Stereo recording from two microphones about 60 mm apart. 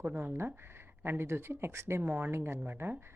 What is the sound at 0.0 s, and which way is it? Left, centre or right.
Speech, right.